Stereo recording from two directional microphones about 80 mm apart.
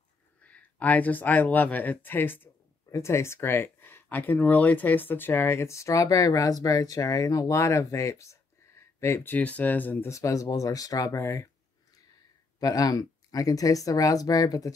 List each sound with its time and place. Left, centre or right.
0.4 s speech: centre
2.9 s speech: left
10.0 s speech: left
12.5 s speech: left